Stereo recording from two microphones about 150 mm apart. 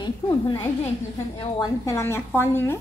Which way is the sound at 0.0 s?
30° left (ahead or behind).